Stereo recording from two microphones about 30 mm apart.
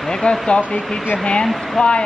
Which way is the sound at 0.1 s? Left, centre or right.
Left.